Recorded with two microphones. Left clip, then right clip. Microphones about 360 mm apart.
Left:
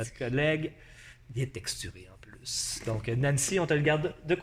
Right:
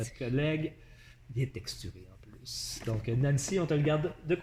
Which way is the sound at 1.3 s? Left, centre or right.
Left.